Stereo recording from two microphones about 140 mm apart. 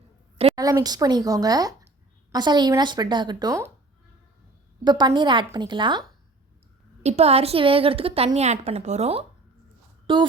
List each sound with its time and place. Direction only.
0.5 s a woman's voice: 25° right (ahead or behind)
4.8 s speech: 30° right (ahead or behind)
7.0 s a woman's voice: 50° right (ahead or behind)
10.1 s speech: 35° right (ahead or behind)